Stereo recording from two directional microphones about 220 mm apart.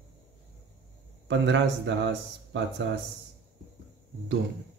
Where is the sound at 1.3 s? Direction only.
55° right (ahead or behind).